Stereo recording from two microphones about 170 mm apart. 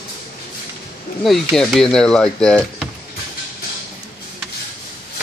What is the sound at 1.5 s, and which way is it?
Speech, 5° left (ahead or behind).